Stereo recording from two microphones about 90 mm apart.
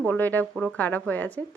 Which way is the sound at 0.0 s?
20° left (ahead or behind).